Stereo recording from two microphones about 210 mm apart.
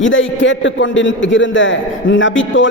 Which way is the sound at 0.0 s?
65° left (ahead or behind).